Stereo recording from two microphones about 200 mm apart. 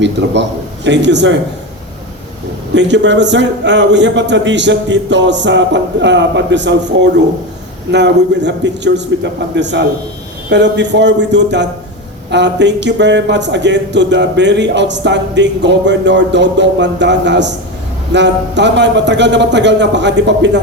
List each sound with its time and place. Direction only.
0.0 s a man's voice: 60° right (ahead or behind)
2.7 s a man's voice: 60° right (ahead or behind)